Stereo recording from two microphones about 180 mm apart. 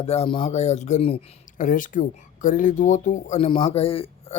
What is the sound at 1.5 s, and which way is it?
Speech, 50° left (ahead or behind).